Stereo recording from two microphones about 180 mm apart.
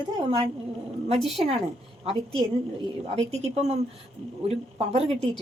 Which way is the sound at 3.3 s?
35° right (ahead or behind).